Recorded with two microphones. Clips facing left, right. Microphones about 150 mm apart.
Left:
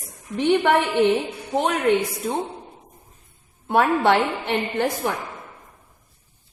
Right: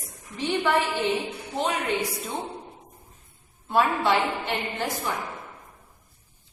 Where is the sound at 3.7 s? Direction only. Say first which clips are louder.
Left 4 dB; 60° left (ahead or behind).